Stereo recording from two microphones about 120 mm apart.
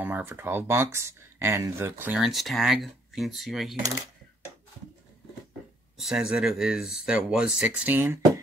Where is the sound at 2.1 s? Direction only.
Centre (ahead or behind).